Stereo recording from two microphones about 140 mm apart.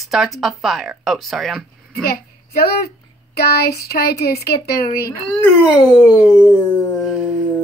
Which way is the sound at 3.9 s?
90° left.